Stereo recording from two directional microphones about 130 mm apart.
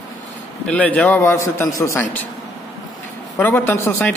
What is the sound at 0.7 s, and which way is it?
A man's voice, 10° left (ahead or behind).